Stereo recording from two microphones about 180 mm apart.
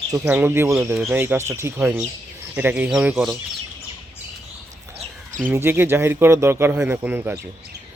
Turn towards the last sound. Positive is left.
turn(degrees=-10)  # may be behind; listen again after turning